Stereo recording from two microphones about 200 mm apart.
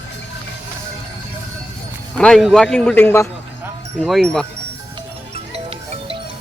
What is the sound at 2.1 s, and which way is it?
A man's voice, 5° left (ahead or behind).